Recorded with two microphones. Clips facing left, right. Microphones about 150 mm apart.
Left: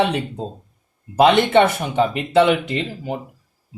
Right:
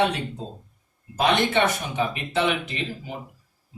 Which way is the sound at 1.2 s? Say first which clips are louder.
Left 7 dB; 65° left (ahead or behind).